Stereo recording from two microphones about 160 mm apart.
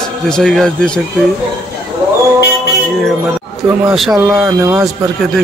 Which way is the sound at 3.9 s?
Centre (ahead or behind).